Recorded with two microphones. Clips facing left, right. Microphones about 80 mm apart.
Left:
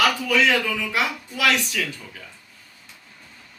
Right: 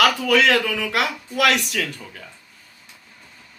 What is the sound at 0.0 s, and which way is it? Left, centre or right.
A man's voice, right.